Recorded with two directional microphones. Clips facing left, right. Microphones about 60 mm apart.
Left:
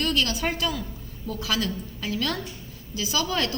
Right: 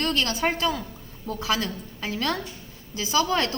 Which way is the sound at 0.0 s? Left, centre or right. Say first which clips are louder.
Right 1 dB; right.